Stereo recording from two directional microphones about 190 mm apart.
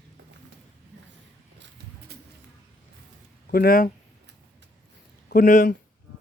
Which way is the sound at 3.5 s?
50° left (ahead or behind).